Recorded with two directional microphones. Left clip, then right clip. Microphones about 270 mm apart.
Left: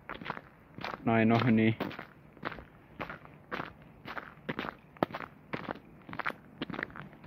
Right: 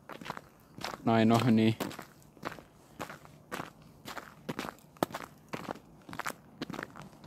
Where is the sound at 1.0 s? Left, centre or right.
Centre.